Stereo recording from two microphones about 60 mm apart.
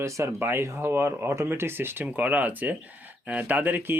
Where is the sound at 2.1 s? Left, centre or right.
Right.